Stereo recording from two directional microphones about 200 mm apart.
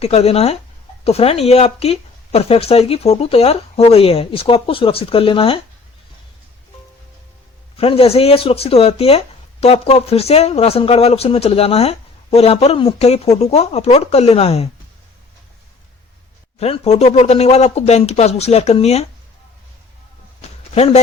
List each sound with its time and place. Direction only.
0.0 s speech: 30° left (ahead or behind)
7.8 s speech: 30° left (ahead or behind)
16.6 s speech: 30° left (ahead or behind)
20.7 s speech: 30° left (ahead or behind)